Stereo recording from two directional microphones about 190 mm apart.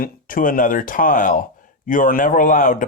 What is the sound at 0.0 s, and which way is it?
Speech, 45° left (ahead or behind).